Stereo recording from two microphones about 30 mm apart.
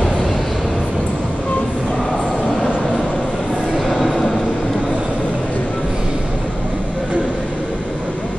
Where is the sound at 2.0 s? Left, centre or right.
Centre.